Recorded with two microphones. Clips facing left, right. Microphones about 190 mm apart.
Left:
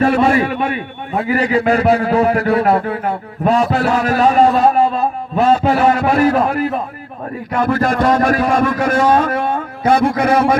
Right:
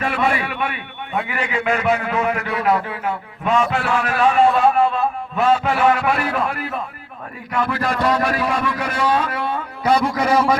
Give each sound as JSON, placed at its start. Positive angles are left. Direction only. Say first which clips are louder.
{"t": 0.0, "sound": "a man's voice", "louder": "left 8 dB", "side_deg": 40}
{"t": 2.8, "sound": "a man's voice", "louder": "left 7 dB", "side_deg": 50}
{"t": 3.1, "sound": "a man's voice", "louder": "left 4 dB", "side_deg": 35}